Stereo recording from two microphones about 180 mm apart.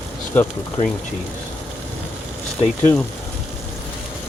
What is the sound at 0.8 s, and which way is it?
Speech, 35° left (ahead or behind).